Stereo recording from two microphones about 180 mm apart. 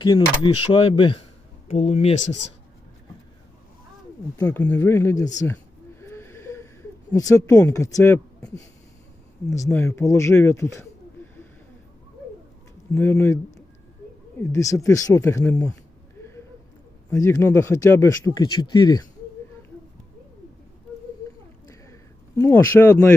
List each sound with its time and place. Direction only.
0.0 s speech: 25° left (ahead or behind)
4.4 s speech: 10° left (ahead or behind)
6.0 s wheeze: 15° left (ahead or behind)
7.1 s speech: 20° left (ahead or behind)
9.6 s speech: 15° left (ahead or behind)
12.9 s speech: 15° left (ahead or behind)
14.5 s speech: 20° left (ahead or behind)
17.1 s speech: 15° left (ahead or behind)
22.4 s speech: 15° left (ahead or behind)